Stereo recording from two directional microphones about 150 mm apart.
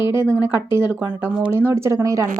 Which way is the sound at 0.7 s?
15° right (ahead or behind).